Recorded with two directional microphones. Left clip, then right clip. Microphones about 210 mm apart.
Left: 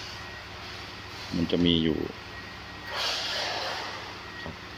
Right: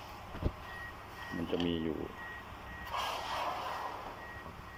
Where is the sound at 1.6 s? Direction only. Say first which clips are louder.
Left 11 dB; 15° left (ahead or behind).